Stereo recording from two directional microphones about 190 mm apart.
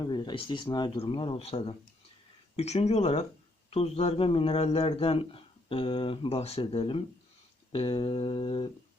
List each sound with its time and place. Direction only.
0.0 s a man's voice: 25° left (ahead or behind)